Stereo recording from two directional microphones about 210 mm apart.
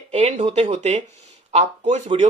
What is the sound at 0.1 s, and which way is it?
Speech, 30° right (ahead or behind).